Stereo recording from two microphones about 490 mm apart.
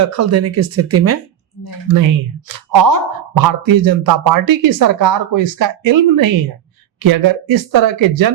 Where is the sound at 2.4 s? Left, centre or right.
Right.